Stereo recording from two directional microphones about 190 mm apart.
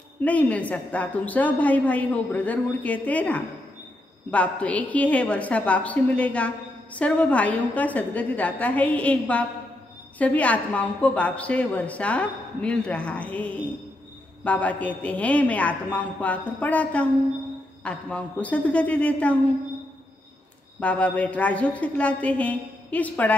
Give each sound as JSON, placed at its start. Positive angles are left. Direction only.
{"t": 0.2, "sound": "a woman's voice", "side_deg": 5}
{"t": 20.8, "sound": "a woman's voice", "side_deg": 5}